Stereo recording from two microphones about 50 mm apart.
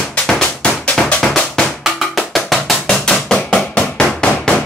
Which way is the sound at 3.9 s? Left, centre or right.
Centre.